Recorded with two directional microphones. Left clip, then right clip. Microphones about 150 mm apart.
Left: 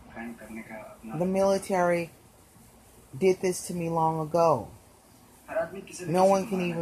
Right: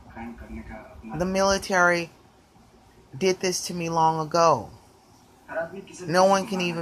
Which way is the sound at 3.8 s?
15° right (ahead or behind).